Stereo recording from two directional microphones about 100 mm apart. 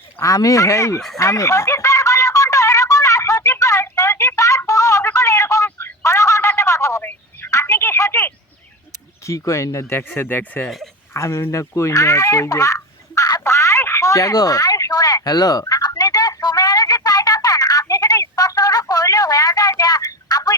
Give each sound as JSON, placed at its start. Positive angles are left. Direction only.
{"t": 0.2, "sound": "speech", "side_deg": 30}
{"t": 1.2, "sound": "a sound", "side_deg": 30}
{"t": 9.2, "sound": "speech", "side_deg": 30}
{"t": 11.1, "sound": "speech", "side_deg": 30}
{"t": 13.4, "sound": "telephone", "side_deg": 30}